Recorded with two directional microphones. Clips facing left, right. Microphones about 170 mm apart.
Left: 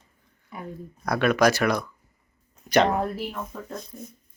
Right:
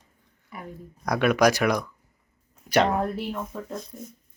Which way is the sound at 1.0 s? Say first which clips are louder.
Even; 15° right (ahead or behind).